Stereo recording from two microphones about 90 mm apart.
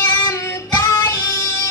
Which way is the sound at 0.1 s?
30° left (ahead or behind).